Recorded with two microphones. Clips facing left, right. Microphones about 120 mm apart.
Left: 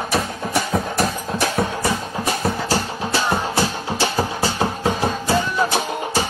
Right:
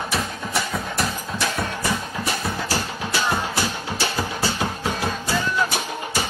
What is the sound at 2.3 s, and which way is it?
Music, 30° left (ahead or behind).